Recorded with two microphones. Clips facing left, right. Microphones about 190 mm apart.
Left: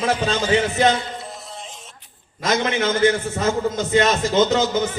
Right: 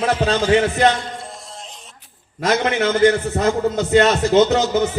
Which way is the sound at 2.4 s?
60° right (ahead or behind).